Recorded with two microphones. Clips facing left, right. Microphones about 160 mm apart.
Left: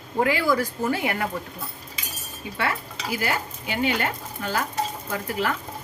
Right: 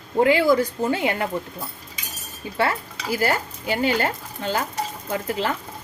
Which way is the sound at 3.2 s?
35° right (ahead or behind).